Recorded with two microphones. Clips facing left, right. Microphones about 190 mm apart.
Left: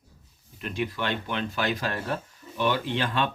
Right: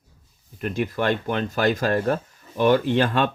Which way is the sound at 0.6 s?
45° right (ahead or behind).